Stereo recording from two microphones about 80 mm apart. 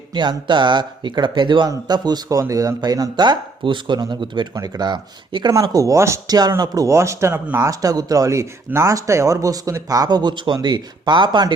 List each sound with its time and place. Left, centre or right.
0.1 s speech: right
1.6 s speech: right
2.4 s speech: right
4.5 s speech: right
5.7 s speech: right
6.2 s a man's voice: right
7.3 s speech: centre
7.6 s speech: right